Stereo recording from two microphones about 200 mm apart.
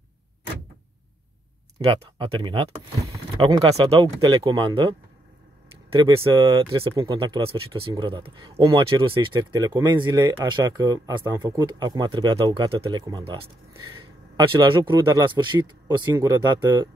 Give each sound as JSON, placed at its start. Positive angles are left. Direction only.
{"t": 1.9, "sound": "speech", "side_deg": -25}